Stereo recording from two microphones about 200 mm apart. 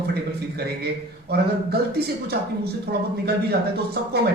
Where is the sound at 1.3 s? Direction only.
50° right (ahead or behind).